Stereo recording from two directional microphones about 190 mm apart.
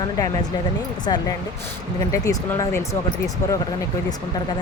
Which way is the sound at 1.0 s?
20° left (ahead or behind).